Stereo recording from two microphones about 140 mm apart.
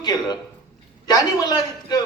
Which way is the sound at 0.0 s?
30° left (ahead or behind).